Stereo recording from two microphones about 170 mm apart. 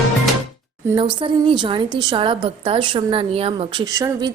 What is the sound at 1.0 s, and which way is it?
A woman's voice, 30° right (ahead or behind).